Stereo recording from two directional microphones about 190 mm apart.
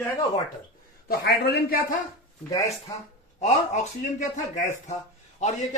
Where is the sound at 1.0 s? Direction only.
55° left (ahead or behind).